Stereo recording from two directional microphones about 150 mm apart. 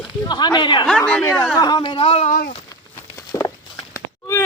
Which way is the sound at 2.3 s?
75° left (ahead or behind).